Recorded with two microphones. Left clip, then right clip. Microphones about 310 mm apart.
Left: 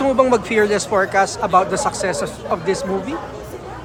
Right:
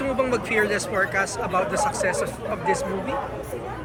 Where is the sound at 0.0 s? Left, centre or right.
Centre.